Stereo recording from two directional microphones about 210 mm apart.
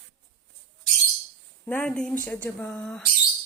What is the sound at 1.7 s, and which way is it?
A woman's voice, 5° left (ahead or behind).